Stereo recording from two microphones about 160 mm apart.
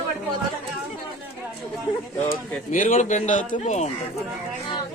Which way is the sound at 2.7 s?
55° left (ahead or behind).